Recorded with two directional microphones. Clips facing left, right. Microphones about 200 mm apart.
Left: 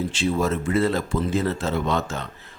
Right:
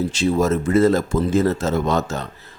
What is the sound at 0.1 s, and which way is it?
Speech, 40° right (ahead or behind).